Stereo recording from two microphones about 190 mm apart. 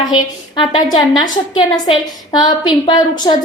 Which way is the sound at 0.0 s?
25° left (ahead or behind).